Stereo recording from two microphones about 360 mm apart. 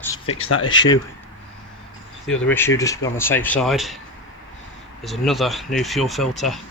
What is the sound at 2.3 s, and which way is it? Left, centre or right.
Speech, centre.